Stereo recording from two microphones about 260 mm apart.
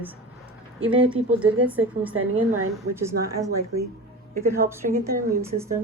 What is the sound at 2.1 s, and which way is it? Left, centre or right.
Speech, right.